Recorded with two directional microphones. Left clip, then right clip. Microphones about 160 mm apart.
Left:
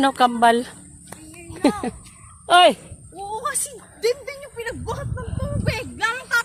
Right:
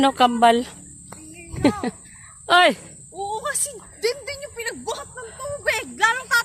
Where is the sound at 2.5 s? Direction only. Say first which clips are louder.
Left 2 dB; 20° right (ahead or behind).